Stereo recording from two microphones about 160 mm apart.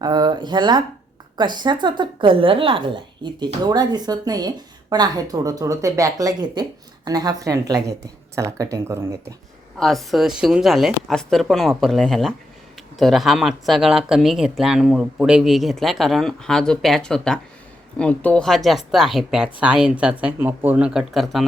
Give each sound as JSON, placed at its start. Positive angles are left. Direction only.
{"t": 0.0, "sound": "a woman's voice", "side_deg": -25}
{"t": 9.7, "sound": "speech", "side_deg": 0}